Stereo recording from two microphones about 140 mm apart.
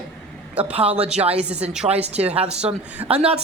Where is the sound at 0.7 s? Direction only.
45° right (ahead or behind).